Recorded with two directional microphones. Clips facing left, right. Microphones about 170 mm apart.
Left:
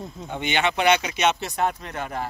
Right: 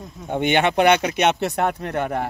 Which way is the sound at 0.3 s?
55° right (ahead or behind).